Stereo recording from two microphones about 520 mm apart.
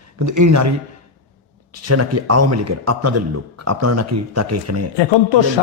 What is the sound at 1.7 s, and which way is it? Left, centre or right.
A man's voice, right.